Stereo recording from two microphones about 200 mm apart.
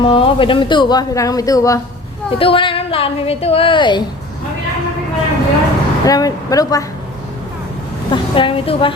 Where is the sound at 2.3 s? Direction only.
25° left (ahead or behind).